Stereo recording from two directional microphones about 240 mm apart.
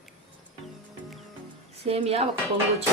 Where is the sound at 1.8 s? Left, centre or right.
Right.